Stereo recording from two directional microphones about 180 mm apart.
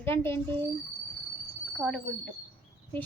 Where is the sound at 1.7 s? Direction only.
Centre (ahead or behind).